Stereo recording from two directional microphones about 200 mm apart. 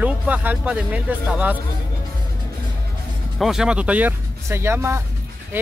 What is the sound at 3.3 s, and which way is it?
Speech, centre (ahead or behind).